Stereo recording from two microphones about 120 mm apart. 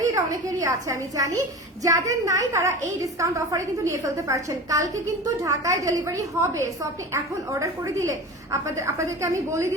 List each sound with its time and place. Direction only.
0.0 s a woman's voice: 25° right (ahead or behind)